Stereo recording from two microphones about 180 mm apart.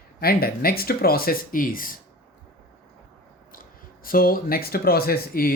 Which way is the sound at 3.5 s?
50° left (ahead or behind).